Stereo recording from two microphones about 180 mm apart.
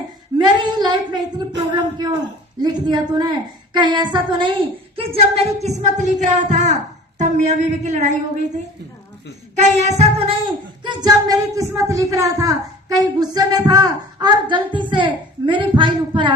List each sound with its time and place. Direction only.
0.3 s a sound: 25° right (ahead or behind)
2.6 s speech: 25° right (ahead or behind)
10.8 s speech: 20° right (ahead or behind)